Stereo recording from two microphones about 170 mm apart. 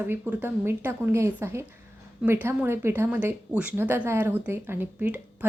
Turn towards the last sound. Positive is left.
turn(degrees=-10)  # may be behind; listen again after turning